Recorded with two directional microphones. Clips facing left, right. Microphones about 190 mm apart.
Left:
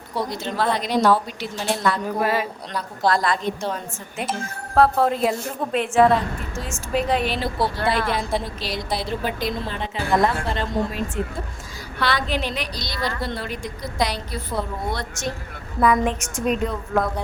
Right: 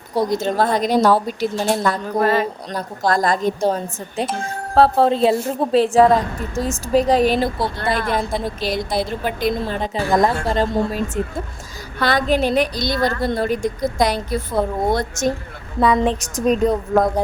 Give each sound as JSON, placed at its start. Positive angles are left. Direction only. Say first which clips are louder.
{"t": 0.1, "sound": "a woman's voice", "louder": "right 8 dB", "side_deg": -45}
{"t": 2.1, "sound": "speech", "louder": "right 5 dB", "side_deg": 10}
{"t": 2.7, "sound": "a woman's voice", "louder": "right 1 dB", "side_deg": -45}
{"t": 8.6, "sound": "a woman's voice", "louder": "right 6 dB", "side_deg": -50}
{"t": 15.8, "sound": "speech", "louder": "right 3 dB", "side_deg": -30}